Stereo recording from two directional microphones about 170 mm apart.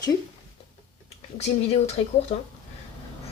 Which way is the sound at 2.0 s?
40° left (ahead or behind).